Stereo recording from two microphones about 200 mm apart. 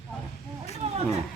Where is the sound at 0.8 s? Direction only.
30° right (ahead or behind).